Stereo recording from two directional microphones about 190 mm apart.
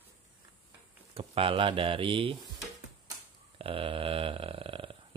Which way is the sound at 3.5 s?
30° right (ahead or behind).